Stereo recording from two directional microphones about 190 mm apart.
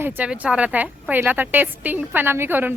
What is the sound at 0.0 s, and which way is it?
A woman's voice, 5° right (ahead or behind).